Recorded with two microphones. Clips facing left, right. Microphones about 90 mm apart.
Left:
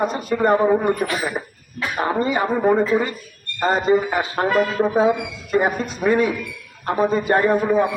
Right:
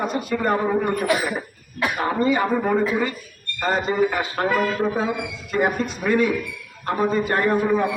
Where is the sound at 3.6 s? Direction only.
25° left (ahead or behind).